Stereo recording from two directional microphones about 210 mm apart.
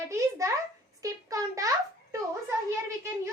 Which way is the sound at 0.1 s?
15° right (ahead or behind).